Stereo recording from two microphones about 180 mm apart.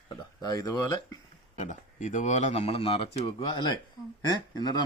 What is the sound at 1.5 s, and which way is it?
Speech, 45° left (ahead or behind).